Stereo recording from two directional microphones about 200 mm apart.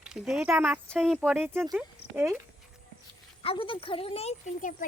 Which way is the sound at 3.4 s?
25° left (ahead or behind).